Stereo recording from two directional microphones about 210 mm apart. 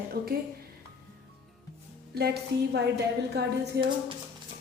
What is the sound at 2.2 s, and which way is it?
Speech, 50° right (ahead or behind).